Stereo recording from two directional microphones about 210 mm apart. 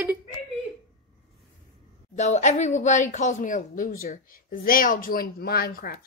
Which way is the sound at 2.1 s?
35° left (ahead or behind).